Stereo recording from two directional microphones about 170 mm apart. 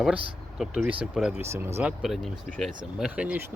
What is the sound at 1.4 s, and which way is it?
Speech, 15° right (ahead or behind).